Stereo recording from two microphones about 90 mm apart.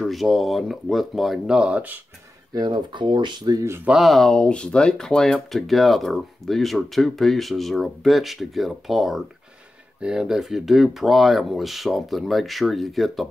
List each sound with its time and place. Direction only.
0.0 s speech: centre (ahead or behind); by 2.0 s 15° right (ahead or behind)
2.5 s speech: 50° right (ahead or behind)
3.5 s speech: 30° right (ahead or behind)
3.8 s speech: 5° right (ahead or behind)